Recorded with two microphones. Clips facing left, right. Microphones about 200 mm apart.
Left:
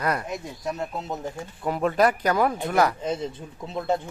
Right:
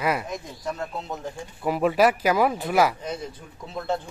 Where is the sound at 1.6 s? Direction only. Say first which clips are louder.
Right 1 dB; 5° right (ahead or behind).